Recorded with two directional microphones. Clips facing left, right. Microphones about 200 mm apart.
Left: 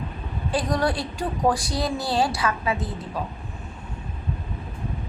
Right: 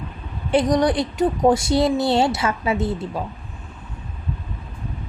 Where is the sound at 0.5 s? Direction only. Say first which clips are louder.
Right 7 dB; 20° right (ahead or behind).